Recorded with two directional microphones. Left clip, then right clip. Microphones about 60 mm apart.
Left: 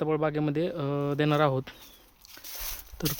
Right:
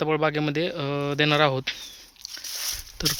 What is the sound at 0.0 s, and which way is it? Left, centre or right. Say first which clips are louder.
Speech: right 4 dB; centre.